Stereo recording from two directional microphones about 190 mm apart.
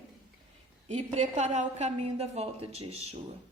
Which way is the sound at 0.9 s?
35° right (ahead or behind).